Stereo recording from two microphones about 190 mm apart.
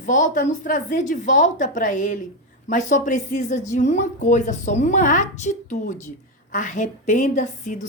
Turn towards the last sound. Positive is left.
turn(degrees=40)  # may be behind; listen again after turning